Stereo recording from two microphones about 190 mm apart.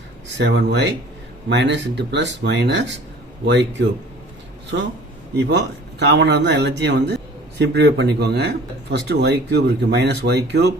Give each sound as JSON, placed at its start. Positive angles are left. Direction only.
{"t": 0.3, "sound": "speech", "side_deg": -70}